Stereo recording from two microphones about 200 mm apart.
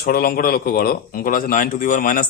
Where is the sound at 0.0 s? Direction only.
50° left (ahead or behind).